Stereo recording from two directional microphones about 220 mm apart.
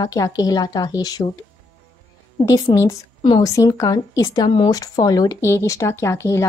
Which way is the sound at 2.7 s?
15° left (ahead or behind).